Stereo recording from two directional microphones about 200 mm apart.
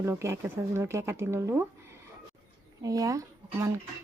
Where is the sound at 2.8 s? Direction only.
15° right (ahead or behind).